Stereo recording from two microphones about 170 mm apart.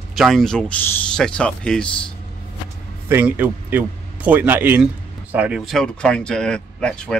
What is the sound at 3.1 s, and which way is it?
A man's voice, 10° right (ahead or behind).